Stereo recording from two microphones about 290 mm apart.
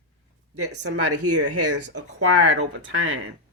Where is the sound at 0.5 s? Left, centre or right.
Right.